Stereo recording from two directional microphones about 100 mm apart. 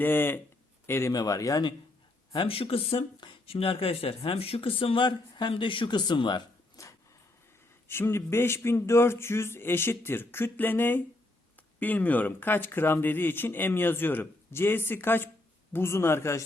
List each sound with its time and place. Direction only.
0.0 s speech: 20° left (ahead or behind)
1.1 s speech: 35° left (ahead or behind)
2.3 s speech: 65° left (ahead or behind)
3.2 s a sound: 50° left (ahead or behind)
3.5 s speech: 70° left (ahead or behind); by 6.4 s 45° left (ahead or behind)
6.8 s a sound: 30° left (ahead or behind)
7.9 s speech: 25° left (ahead or behind)